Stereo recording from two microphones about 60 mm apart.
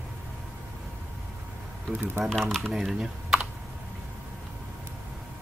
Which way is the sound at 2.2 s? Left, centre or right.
Centre.